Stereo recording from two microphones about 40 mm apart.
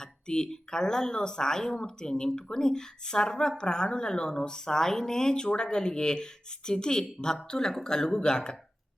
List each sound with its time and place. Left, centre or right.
0.0 s speech: centre